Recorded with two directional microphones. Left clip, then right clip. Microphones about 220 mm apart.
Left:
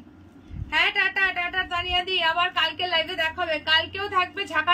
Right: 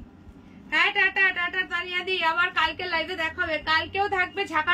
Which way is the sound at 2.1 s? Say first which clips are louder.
Right 1 dB; 10° right (ahead or behind).